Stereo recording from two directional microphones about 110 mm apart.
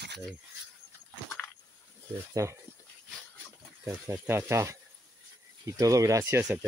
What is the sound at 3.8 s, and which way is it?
Speech, 20° right (ahead or behind).